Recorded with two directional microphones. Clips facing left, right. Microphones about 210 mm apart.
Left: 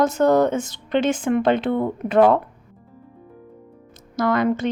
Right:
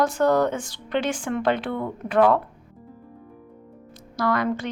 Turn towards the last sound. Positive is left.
turn(degrees=20)  # may be behind; listen again after turning